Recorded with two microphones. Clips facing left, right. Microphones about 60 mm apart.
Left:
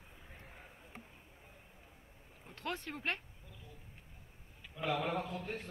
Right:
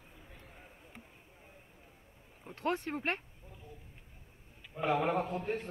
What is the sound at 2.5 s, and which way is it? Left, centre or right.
Speech, right.